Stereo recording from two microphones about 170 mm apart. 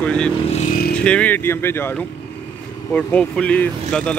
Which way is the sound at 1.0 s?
10° left (ahead or behind).